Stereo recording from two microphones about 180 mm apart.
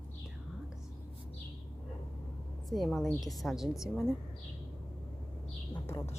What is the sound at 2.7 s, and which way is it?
A woman's voice, centre (ahead or behind).